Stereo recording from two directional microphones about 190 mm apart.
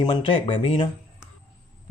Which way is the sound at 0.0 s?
25° left (ahead or behind).